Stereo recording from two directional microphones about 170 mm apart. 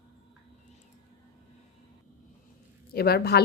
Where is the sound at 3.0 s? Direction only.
65° left (ahead or behind).